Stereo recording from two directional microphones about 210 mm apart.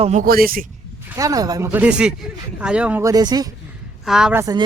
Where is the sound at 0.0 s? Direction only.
35° right (ahead or behind).